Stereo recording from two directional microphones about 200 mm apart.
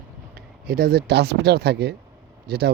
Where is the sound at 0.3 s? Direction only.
50° right (ahead or behind).